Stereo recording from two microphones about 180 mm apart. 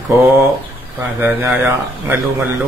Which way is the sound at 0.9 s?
10° right (ahead or behind).